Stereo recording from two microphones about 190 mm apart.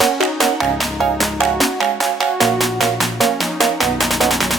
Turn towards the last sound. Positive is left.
turn(degrees=0)  # may be behind; listen again after turning